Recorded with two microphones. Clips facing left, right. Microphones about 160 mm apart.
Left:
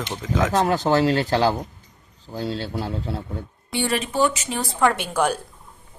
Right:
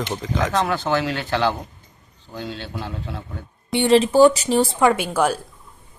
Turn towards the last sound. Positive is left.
turn(degrees=-5)  # may be behind; listen again after turning